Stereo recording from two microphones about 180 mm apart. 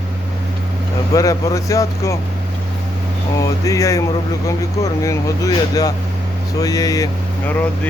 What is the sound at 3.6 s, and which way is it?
Speech, 15° left (ahead or behind).